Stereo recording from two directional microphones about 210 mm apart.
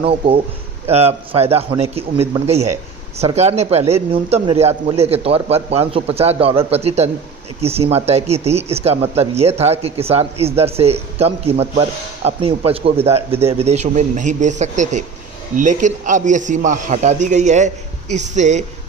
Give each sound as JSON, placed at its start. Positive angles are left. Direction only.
{"t": 0.0, "sound": "a man's voice", "side_deg": -25}